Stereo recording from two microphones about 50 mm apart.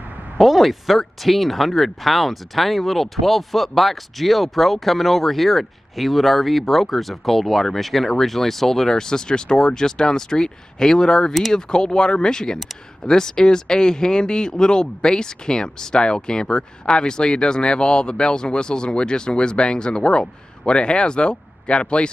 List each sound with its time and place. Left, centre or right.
0.4 s speech: centre